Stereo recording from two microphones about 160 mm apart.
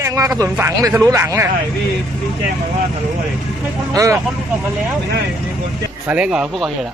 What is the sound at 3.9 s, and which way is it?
Speech, 20° right (ahead or behind).